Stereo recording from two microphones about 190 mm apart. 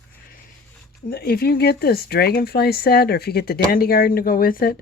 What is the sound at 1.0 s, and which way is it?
Speech, 55° left (ahead or behind).